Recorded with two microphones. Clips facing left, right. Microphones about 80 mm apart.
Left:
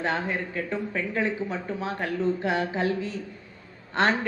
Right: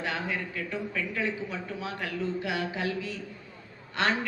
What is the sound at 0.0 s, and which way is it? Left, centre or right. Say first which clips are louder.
A man's voice: left 4 dB; left.